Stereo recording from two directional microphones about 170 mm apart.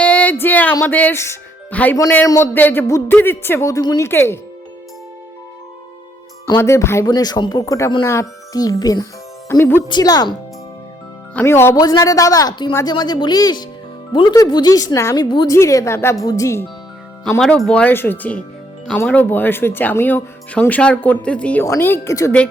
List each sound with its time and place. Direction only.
0.0 s music: 10° left (ahead or behind)
2.0 s speech: 20° left (ahead or behind)
6.6 s speech: 15° left (ahead or behind)
11.3 s speech: 15° left (ahead or behind)
17.4 s speech: 5° left (ahead or behind)